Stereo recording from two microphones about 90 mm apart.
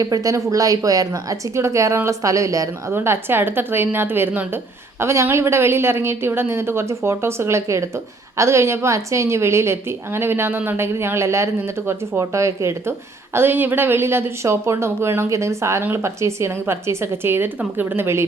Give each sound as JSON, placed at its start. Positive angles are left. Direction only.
{"t": 0.0, "sound": "a woman's voice", "side_deg": -40}
{"t": 2.9, "sound": "a woman's voice", "side_deg": -25}
{"t": 13.3, "sound": "a woman's voice", "side_deg": -25}